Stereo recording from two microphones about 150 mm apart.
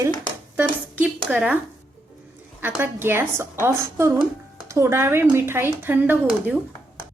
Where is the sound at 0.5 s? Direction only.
10° right (ahead or behind).